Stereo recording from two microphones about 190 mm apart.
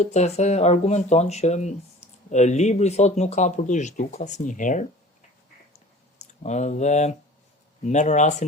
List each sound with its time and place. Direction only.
0.0 s speech: 35° left (ahead or behind)
6.4 s speech: 40° left (ahead or behind)